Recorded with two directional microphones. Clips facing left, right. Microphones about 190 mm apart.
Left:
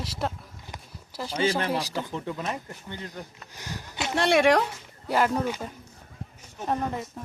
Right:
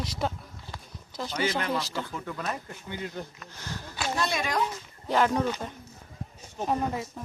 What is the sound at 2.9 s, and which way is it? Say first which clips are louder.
Speech: right 4 dB; 10° right (ahead or behind).